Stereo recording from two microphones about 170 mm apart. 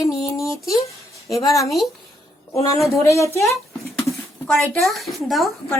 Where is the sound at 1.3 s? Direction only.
20° left (ahead or behind).